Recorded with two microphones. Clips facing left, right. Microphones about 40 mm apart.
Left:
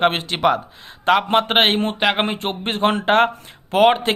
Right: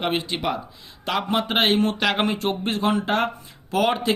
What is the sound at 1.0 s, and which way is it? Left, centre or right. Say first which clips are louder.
Speech: left 7 dB; left.